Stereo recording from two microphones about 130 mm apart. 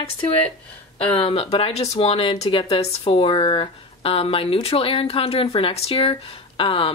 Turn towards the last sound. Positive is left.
turn(degrees=45)  # may be behind; listen again after turning